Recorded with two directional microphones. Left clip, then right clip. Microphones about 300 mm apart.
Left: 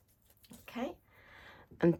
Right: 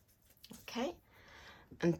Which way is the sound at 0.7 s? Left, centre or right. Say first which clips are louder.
Right 1 dB; centre.